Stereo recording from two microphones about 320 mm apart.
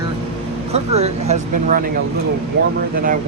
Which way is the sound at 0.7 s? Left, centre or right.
Centre.